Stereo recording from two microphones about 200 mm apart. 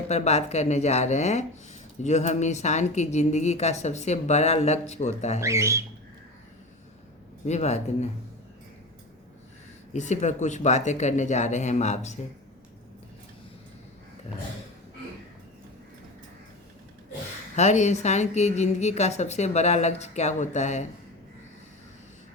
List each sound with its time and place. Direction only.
0.1 s a woman's voice: 30° left (ahead or behind)
5.4 s speech: 15° right (ahead or behind)
7.4 s a woman's voice: 35° left (ahead or behind)
9.9 s a woman's voice: 35° left (ahead or behind)
17.6 s a woman's voice: 35° left (ahead or behind)